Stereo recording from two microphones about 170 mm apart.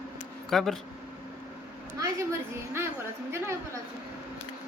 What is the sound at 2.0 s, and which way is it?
A woman's voice, 15° right (ahead or behind).